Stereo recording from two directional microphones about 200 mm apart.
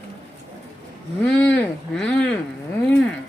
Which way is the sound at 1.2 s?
10° left (ahead or behind).